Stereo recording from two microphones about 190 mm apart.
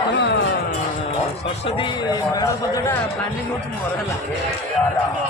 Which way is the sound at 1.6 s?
25° left (ahead or behind).